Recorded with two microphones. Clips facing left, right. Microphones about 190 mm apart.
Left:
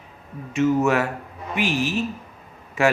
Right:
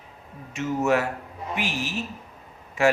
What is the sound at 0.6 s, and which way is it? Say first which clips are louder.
Speech: left 4 dB; 80° left.